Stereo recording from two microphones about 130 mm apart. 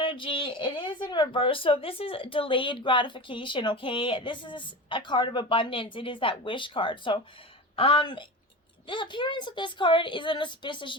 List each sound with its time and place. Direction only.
0.0 s speech: 40° left (ahead or behind)